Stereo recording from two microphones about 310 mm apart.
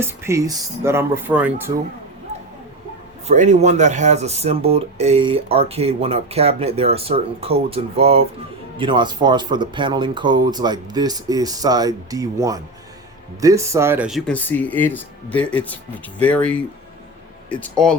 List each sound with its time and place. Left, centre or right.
0.0 s speech: centre
3.2 s speech: right; by 17.9 s centre